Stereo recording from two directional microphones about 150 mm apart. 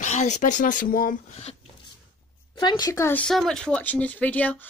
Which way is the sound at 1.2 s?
45° left (ahead or behind).